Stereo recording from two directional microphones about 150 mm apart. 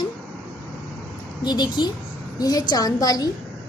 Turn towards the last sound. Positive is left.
turn(degrees=25)  # may be behind; listen again after turning